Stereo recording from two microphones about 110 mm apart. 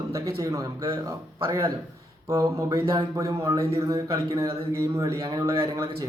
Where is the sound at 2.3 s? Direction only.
30° right (ahead or behind).